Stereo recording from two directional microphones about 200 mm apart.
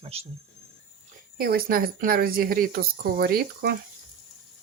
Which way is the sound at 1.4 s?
50° right (ahead or behind).